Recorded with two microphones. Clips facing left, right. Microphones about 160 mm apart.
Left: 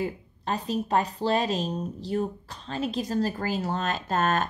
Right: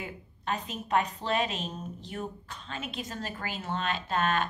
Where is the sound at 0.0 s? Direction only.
35° left (ahead or behind).